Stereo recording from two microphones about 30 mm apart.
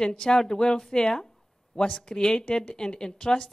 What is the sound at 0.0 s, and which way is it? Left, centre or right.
A woman's voice, left.